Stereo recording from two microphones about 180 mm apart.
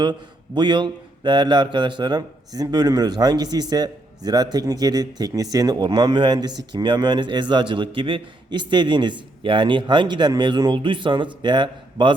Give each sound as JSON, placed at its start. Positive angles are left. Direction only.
{"t": 0.0, "sound": "speech", "side_deg": -25}